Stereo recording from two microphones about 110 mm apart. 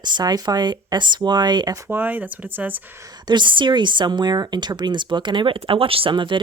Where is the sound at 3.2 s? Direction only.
45° right (ahead or behind).